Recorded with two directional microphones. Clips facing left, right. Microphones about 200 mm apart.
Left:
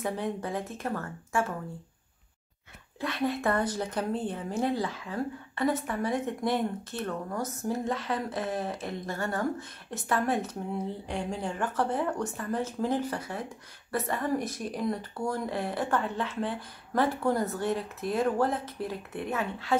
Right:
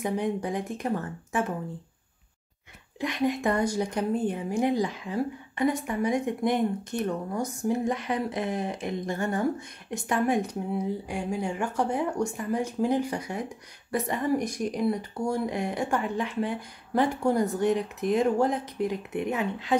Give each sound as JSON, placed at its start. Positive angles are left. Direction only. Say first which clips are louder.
{"t": 0.0, "sound": "speech", "louder": "right 4 dB", "side_deg": -15}
{"t": 3.0, "sound": "speech", "louder": "right 3 dB", "side_deg": -15}